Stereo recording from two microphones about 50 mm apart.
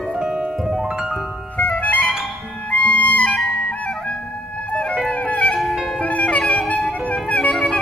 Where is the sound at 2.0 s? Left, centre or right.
Centre.